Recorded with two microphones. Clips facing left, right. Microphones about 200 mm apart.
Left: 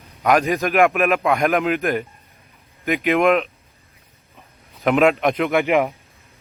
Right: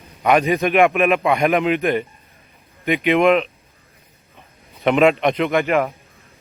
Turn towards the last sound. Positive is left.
turn(degrees=15)  # may be behind; listen again after turning